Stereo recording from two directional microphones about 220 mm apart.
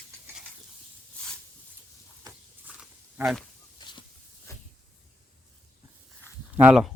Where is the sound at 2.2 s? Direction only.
10° right (ahead or behind).